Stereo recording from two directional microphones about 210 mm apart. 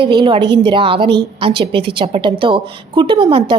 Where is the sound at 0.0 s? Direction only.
20° right (ahead or behind).